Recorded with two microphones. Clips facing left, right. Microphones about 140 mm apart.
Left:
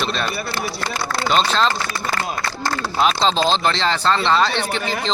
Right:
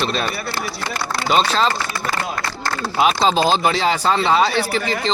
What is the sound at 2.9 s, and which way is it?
Speech, 5° right (ahead or behind).